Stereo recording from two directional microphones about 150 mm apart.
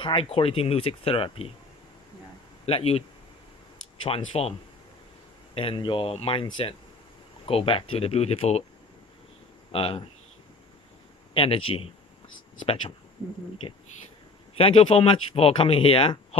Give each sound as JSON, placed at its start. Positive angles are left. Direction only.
{"t": 0.0, "sound": "speech", "side_deg": 40}
{"t": 2.6, "sound": "speech", "side_deg": 40}
{"t": 4.0, "sound": "speech", "side_deg": 40}
{"t": 9.7, "sound": "speech", "side_deg": 40}
{"t": 11.3, "sound": "speech", "side_deg": 40}
{"t": 14.5, "sound": "speech", "side_deg": 40}